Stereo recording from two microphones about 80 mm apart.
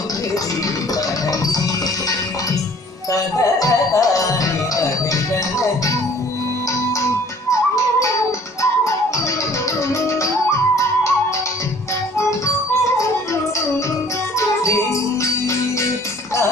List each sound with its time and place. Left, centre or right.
3.1 s music: left
9.9 s music: left
14.6 s music: left